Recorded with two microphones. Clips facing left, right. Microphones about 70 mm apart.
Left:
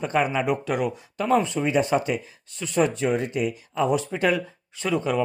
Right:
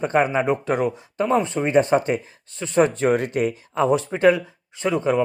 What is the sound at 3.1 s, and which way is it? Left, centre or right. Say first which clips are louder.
Speech: right 4 dB; right.